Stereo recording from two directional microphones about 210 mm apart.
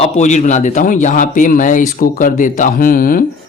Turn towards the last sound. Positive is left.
turn(degrees=40)  # may be behind; listen again after turning